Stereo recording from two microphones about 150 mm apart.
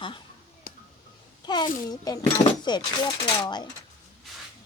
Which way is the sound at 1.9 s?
25° left (ahead or behind).